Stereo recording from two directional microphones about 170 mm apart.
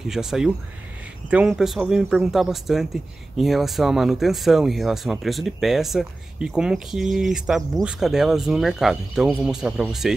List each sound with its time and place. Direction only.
0.0 s speech: 5° right (ahead or behind)